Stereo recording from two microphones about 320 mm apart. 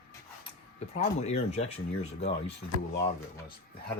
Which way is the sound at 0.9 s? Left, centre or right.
Centre.